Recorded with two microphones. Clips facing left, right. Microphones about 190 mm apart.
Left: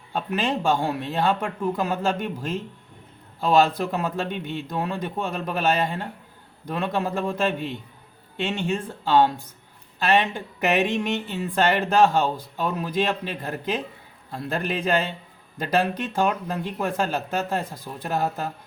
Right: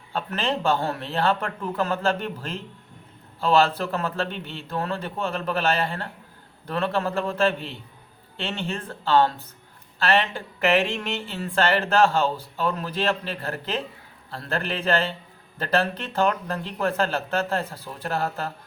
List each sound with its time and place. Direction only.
0.1 s speech: 15° left (ahead or behind)